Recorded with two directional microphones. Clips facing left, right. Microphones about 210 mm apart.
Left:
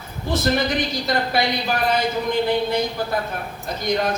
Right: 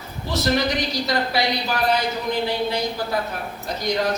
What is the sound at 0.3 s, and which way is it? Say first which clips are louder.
A woman's voice: left 1 dB; 50° left (ahead or behind).